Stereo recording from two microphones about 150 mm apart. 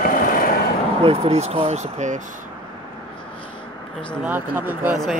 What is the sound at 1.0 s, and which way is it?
Speech, 45° right (ahead or behind).